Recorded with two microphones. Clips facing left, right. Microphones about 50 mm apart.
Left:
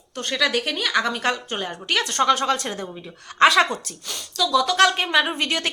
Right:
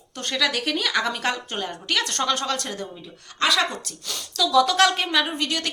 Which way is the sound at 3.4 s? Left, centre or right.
Left.